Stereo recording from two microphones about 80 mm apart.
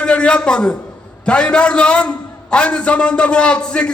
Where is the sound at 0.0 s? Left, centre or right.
Centre.